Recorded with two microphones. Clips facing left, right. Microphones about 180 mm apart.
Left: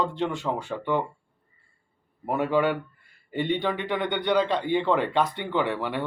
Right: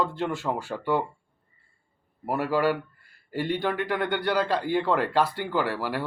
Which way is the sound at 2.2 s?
5° right (ahead or behind).